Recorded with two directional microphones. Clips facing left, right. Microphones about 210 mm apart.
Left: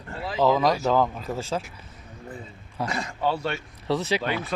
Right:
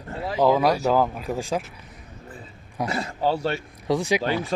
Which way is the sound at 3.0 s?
35° right (ahead or behind).